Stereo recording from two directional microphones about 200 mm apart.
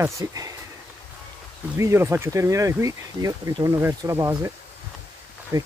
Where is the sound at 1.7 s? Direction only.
15° right (ahead or behind).